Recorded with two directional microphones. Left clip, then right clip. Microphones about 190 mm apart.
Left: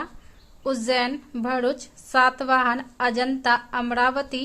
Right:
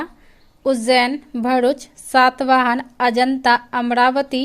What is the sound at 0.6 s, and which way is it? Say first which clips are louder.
A woman's voice: right 8 dB; 25° right (ahead or behind).